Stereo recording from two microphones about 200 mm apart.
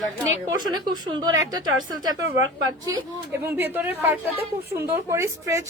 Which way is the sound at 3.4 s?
10° right (ahead or behind).